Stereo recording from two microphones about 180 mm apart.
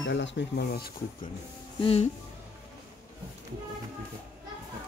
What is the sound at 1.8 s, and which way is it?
Speech, 35° left (ahead or behind).